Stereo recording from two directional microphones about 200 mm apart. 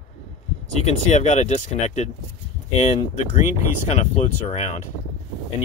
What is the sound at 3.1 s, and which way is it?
Speech, 35° left (ahead or behind).